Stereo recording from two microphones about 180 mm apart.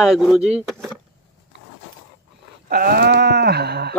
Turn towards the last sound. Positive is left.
turn(degrees=-65)  # may be behind; listen again after turning